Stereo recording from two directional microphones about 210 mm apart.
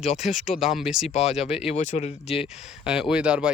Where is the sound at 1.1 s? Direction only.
30° left (ahead or behind).